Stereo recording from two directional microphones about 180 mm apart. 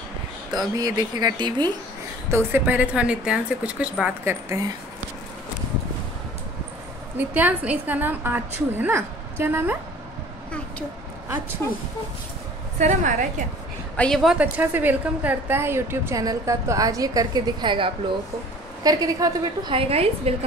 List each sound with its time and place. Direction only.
0.7 s a woman's voice: 20° right (ahead or behind)
2.3 s a woman's voice: 10° right (ahead or behind)
7.2 s a woman's voice: 10° right (ahead or behind)
12.7 s a woman's voice: 40° right (ahead or behind)
13.9 s a woman's voice: 5° left (ahead or behind); by 19.7 s 20° right (ahead or behind)
19.7 s a woman's voice: 30° right (ahead or behind)